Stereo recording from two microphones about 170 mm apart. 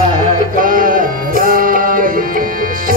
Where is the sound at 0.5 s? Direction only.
55° right (ahead or behind).